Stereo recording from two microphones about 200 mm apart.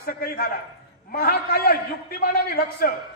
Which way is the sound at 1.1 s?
50° left (ahead or behind).